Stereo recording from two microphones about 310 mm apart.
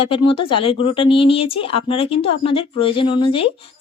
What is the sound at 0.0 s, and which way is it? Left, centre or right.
Speech, centre.